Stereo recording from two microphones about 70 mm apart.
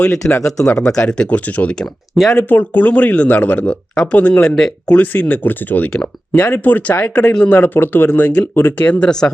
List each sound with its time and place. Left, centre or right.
0.3 s speech: left
0.8 s speech: centre
2.1 s speech: centre
2.4 s speech: left; by 4.9 s centre
4.9 s speech: left
9.0 s speech: centre